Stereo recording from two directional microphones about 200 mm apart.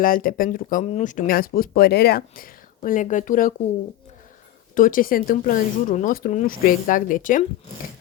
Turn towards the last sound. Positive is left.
turn(degrees=40)  # may be behind; listen again after turning